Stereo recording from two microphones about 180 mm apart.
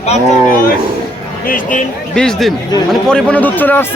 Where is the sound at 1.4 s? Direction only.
50° left (ahead or behind).